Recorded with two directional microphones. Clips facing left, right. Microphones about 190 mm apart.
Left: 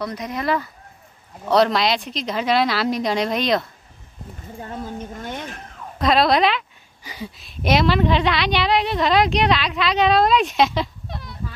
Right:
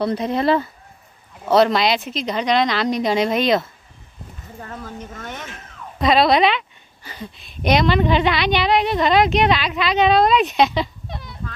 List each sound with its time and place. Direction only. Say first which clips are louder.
0.0 s speech: right 6 dB; 30° right (ahead or behind)
1.5 s a woman's voice: right 2 dB; centre (ahead or behind)
4.6 s speech: left 3 dB; 25° left (ahead or behind)
5.9 s a woman's voice: right 2 dB; centre (ahead or behind)
7.0 s a woman's voice: left 1 dB; 10° left (ahead or behind)